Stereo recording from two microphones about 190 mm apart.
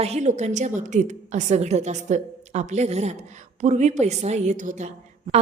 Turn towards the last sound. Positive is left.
turn(degrees=-40)  # may be behind; listen again after turning